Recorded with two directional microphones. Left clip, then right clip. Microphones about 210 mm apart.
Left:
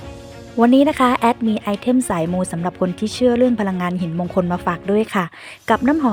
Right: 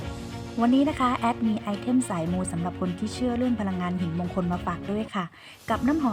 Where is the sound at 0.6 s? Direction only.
45° left (ahead or behind).